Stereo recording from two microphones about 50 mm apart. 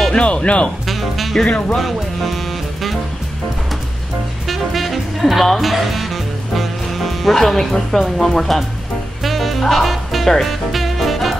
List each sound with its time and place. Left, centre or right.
0.1 s speech: left
0.8 s speech: centre
4.5 s speech: centre
9.2 s music: centre